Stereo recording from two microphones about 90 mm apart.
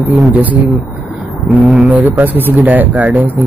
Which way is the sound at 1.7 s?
15° right (ahead or behind).